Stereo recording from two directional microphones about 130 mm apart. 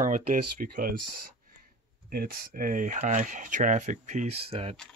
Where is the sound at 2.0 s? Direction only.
90° right; by 4.7 s 50° right (ahead or behind).